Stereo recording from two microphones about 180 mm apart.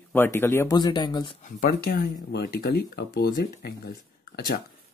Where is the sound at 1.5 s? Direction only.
50° left (ahead or behind).